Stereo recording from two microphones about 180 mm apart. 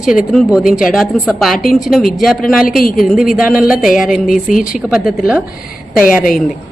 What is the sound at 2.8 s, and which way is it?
Speech, 50° left (ahead or behind).